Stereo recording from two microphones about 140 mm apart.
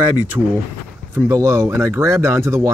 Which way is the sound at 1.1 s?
20° right (ahead or behind).